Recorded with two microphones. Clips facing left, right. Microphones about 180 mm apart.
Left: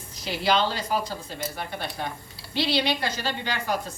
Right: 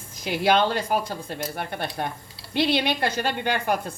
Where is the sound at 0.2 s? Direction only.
55° right (ahead or behind).